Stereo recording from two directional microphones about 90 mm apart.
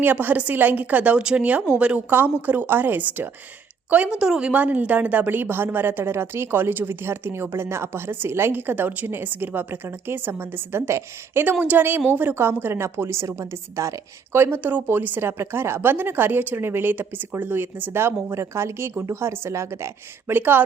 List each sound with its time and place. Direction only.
0.0 s a woman's voice: 20° right (ahead or behind)